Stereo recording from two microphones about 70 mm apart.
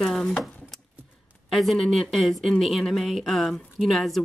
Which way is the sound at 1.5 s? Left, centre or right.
Centre.